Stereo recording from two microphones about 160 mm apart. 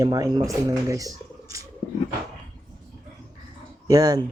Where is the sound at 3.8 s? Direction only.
25° right (ahead or behind).